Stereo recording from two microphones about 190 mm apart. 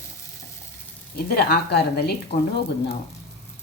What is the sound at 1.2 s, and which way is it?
Speech, 55° left (ahead or behind).